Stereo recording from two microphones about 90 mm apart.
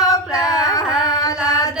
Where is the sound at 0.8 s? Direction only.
10° right (ahead or behind).